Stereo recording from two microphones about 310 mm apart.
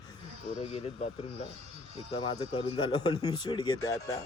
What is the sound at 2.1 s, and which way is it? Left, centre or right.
Speech, centre.